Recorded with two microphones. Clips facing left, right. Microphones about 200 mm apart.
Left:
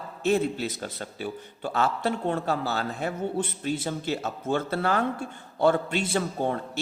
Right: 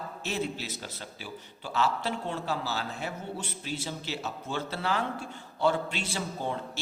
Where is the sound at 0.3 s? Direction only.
55° left (ahead or behind).